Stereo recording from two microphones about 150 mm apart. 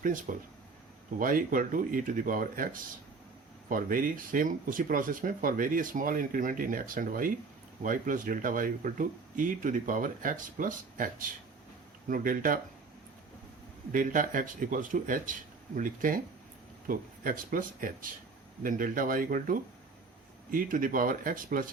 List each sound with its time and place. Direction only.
0.0 s speech: 60° right (ahead or behind)
13.9 s speech: 65° right (ahead or behind)